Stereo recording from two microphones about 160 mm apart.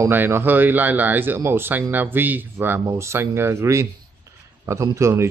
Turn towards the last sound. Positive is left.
turn(degrees=-15)  # may be behind; listen again after turning